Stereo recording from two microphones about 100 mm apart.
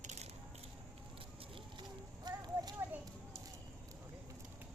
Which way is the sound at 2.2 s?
45° right (ahead or behind).